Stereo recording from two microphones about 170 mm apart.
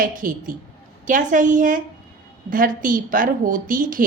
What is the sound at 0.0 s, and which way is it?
A woman's voice, 55° right (ahead or behind).